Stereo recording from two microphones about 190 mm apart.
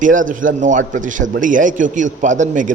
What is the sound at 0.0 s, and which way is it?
A man's voice, 45° right (ahead or behind).